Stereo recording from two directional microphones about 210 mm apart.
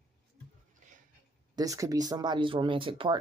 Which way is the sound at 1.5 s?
15° right (ahead or behind).